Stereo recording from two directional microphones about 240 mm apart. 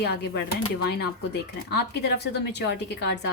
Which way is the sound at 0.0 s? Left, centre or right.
Left.